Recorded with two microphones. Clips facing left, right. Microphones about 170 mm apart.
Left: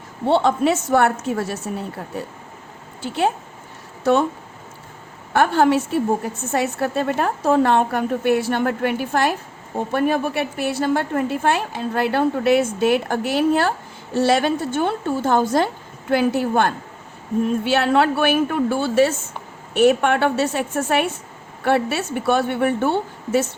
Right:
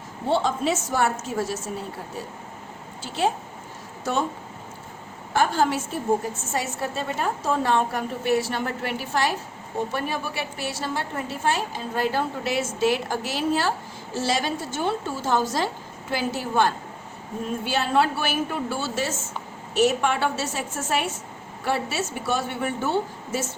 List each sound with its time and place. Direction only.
0.3 s a woman's voice: 60° left (ahead or behind)
3.0 s a woman's voice: 60° left (ahead or behind)
5.3 s a woman's voice: 60° left (ahead or behind)